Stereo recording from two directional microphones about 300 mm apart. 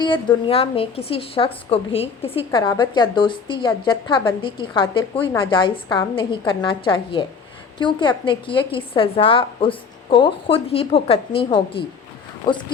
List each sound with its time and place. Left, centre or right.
0.0 s a woman's voice: centre